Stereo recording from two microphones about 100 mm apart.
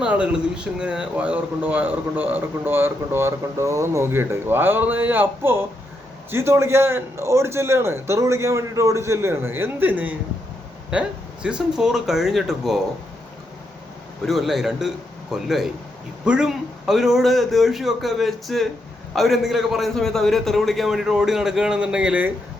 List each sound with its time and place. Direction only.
0.0 s a man's voice: 10° right (ahead or behind)
14.3 s a man's voice: centre (ahead or behind)